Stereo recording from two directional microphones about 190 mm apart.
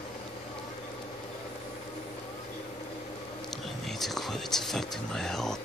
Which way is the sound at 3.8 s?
Centre (ahead or behind).